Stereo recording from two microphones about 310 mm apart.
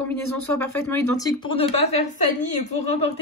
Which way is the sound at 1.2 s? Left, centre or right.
Centre.